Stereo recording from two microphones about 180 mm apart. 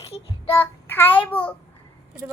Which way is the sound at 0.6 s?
10° left (ahead or behind).